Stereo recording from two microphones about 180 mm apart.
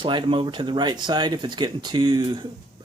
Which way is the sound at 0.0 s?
25° right (ahead or behind).